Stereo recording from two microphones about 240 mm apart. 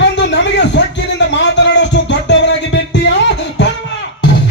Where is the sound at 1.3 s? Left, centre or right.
Left.